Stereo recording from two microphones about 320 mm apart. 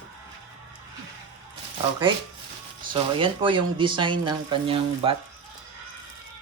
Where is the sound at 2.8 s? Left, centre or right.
Centre.